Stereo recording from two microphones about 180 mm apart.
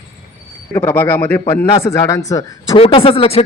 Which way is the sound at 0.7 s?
10° left (ahead or behind).